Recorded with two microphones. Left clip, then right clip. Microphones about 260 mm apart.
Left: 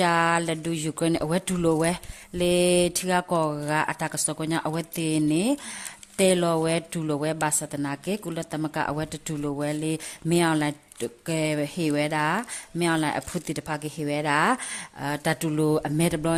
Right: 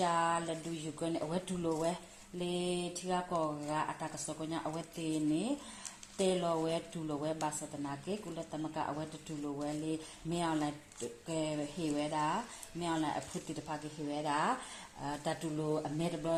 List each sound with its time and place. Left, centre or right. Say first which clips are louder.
0.0 s speech: left 10 dB; left